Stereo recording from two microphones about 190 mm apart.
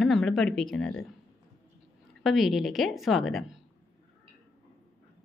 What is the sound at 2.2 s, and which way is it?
A woman's voice, centre (ahead or behind).